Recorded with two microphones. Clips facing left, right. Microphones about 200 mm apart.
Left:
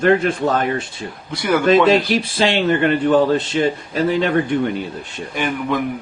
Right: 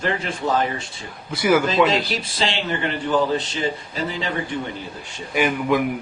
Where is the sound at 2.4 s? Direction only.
60° left (ahead or behind).